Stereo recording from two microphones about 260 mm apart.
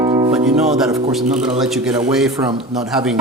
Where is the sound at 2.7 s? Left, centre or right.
Centre.